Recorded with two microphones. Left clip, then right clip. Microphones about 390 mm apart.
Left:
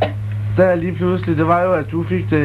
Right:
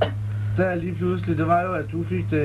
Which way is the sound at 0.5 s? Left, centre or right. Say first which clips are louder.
Left 10 dB; left.